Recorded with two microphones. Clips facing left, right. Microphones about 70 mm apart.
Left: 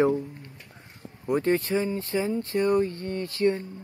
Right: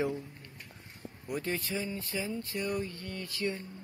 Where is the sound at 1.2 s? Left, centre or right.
Left.